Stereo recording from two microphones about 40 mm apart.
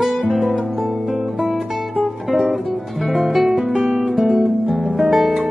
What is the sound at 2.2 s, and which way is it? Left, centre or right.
Music, right.